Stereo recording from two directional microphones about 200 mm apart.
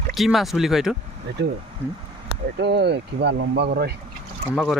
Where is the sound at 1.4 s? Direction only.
55° right (ahead or behind).